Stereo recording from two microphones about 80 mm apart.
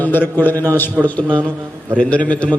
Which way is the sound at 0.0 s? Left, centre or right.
Left.